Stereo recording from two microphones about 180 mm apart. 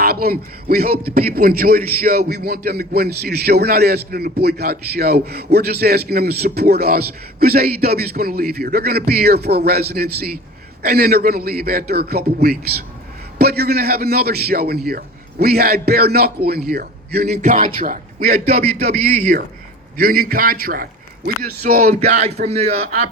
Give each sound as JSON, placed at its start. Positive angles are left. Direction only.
{"t": 0.0, "sound": "a man's voice", "side_deg": -55}
{"t": 17.2, "sound": "a man's voice", "side_deg": -40}
{"t": 20.0, "sound": "a man's voice", "side_deg": -55}
{"t": 22.1, "sound": "speech", "side_deg": -40}